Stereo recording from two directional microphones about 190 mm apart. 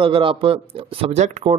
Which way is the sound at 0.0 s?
25° right (ahead or behind).